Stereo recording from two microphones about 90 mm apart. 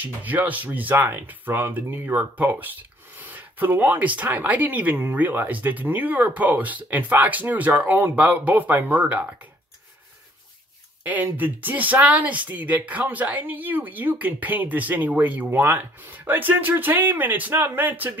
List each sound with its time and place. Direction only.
0.0 s speech: 20° right (ahead or behind)
11.1 s speech: 20° right (ahead or behind)